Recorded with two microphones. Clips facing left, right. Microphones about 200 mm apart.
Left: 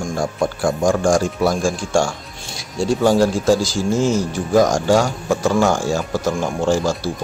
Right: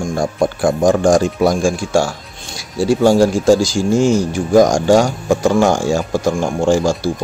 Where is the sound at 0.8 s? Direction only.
20° right (ahead or behind).